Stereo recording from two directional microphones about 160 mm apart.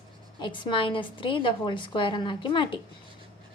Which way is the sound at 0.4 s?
30° left (ahead or behind).